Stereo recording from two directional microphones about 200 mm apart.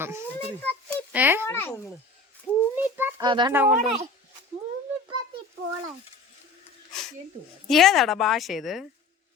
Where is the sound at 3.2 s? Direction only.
25° right (ahead or behind).